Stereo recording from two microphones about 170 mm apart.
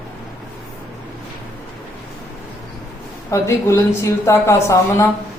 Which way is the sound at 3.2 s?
15° left (ahead or behind).